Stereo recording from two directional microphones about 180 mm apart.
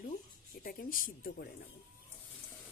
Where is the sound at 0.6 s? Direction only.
50° left (ahead or behind).